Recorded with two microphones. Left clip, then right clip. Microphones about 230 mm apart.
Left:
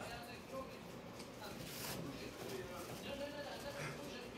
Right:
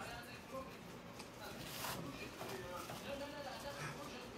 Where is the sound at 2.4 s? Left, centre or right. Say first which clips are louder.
Right 1 dB; centre.